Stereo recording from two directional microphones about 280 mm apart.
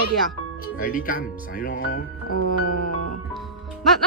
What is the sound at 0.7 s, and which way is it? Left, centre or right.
Speech, left.